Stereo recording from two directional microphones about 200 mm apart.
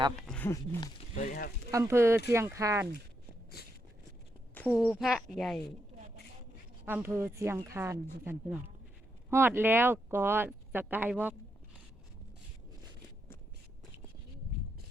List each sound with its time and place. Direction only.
0.2 s speech: 5° left (ahead or behind)
1.1 s speech: 40° left (ahead or behind)
1.7 s speech: 15° right (ahead or behind)
4.5 s speech: 5° left (ahead or behind)
4.8 s speech: 5° right (ahead or behind)
6.8 s speech: 10° right (ahead or behind)